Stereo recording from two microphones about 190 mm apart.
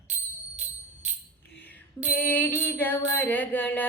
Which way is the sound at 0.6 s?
40° right (ahead or behind).